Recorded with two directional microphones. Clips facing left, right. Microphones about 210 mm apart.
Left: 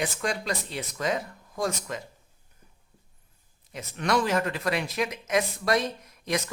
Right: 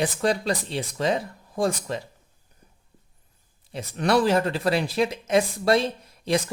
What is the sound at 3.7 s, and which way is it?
Speech, 30° right (ahead or behind).